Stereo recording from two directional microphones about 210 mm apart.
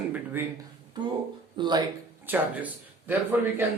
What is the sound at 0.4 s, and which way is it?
Speech, 10° right (ahead or behind).